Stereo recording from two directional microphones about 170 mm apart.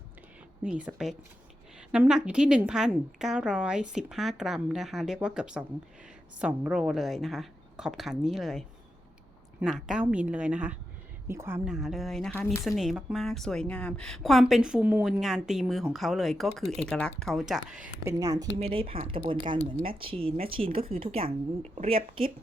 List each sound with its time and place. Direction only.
0.6 s a woman's voice: 10° right (ahead or behind)
18.0 s speech: 20° right (ahead or behind)
18.6 s speech: 35° right (ahead or behind)